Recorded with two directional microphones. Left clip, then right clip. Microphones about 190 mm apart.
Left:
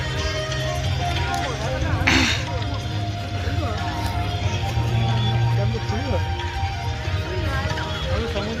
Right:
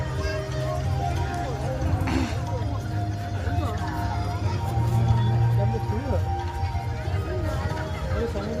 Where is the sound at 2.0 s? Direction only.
Centre (ahead or behind).